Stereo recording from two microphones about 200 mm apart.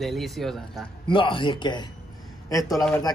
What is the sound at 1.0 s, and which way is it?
Speech, 25° left (ahead or behind).